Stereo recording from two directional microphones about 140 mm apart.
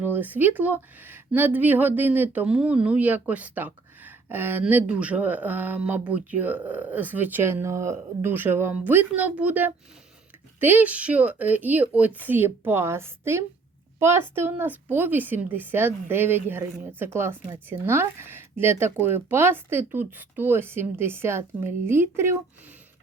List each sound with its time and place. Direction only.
0.0 s speech: 15° right (ahead or behind)